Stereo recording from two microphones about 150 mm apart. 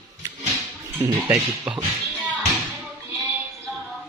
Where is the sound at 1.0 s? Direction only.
15° right (ahead or behind).